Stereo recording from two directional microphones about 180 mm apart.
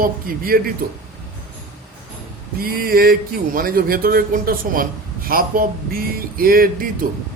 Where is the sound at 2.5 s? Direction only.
55° right (ahead or behind).